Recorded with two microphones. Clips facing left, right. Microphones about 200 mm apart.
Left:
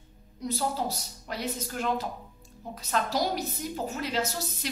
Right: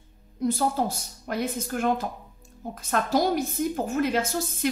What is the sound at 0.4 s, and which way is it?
A woman's voice, 50° right (ahead or behind).